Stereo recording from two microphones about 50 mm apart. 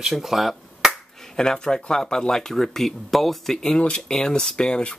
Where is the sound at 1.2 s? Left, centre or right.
Centre.